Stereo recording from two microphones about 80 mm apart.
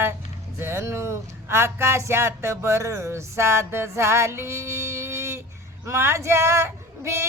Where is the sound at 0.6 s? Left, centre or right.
Right.